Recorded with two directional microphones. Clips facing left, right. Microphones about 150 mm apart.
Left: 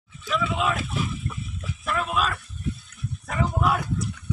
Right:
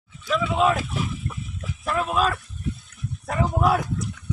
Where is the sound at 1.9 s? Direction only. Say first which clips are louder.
Right 3 dB; 35° right (ahead or behind).